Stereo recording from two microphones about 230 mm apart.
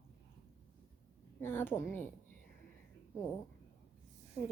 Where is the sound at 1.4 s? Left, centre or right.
Centre.